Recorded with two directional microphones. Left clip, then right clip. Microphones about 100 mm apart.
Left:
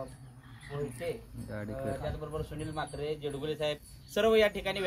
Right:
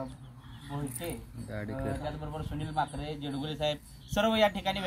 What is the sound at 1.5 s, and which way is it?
Speech, 10° left (ahead or behind).